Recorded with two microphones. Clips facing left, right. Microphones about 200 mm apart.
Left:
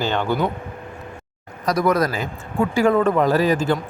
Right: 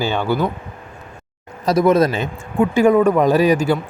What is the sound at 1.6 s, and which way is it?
Speech, 25° right (ahead or behind).